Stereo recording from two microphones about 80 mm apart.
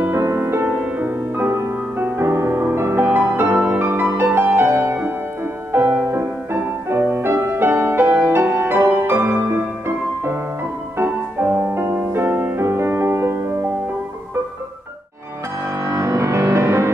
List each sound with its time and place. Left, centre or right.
0.0 s music: right
11.0 s music: right
15.8 s music: right